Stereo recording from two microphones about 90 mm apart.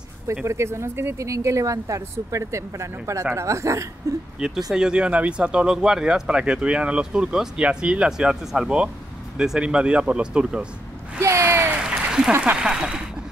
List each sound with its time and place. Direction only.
0.5 s speech: 30° right (ahead or behind)
4.4 s speech: 5° right (ahead or behind)
11.1 s a sound: 30° right (ahead or behind)
12.3 s speech: 15° right (ahead or behind)